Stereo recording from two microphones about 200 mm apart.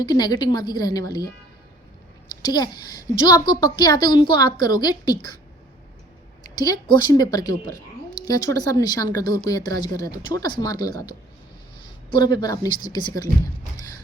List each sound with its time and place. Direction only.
0.0 s a woman's voice: 20° left (ahead or behind)
2.4 s a woman's voice: 20° left (ahead or behind)
6.6 s a woman's voice: 20° left (ahead or behind)
12.2 s a woman's voice: 20° left (ahead or behind)